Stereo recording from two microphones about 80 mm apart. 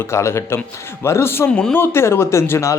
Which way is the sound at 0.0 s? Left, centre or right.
Left.